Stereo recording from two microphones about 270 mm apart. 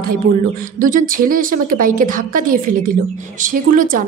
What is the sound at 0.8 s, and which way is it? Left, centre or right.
A woman's voice, right.